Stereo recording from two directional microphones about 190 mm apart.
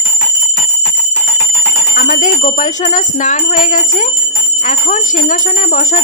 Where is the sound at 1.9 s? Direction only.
45° left (ahead or behind).